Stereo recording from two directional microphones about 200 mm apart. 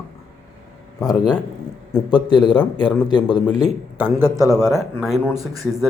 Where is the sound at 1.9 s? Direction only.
20° left (ahead or behind).